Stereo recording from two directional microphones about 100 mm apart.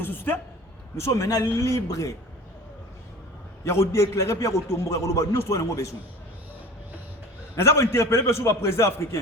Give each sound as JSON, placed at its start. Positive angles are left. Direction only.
{"t": 0.0, "sound": "a man's voice", "side_deg": 20}
{"t": 0.9, "sound": "a man's voice", "side_deg": 30}
{"t": 3.6, "sound": "a man's voice", "side_deg": 25}
{"t": 7.5, "sound": "a man's voice", "side_deg": 30}